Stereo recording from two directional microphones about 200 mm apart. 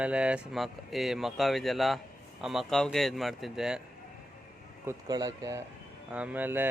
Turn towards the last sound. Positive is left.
turn(degrees=-10)  # may be behind; listen again after turning